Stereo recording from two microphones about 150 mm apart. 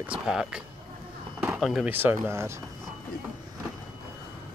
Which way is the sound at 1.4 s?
5° right (ahead or behind).